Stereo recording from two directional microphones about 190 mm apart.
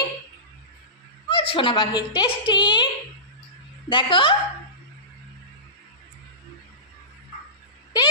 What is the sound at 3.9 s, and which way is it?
Speech, 25° left (ahead or behind).